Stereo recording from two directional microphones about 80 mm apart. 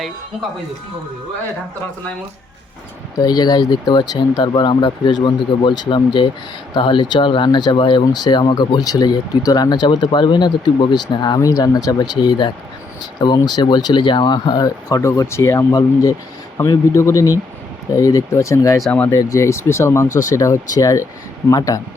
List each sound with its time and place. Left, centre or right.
3.2 s speech: left
11.3 s speech: left
15.0 s speech: left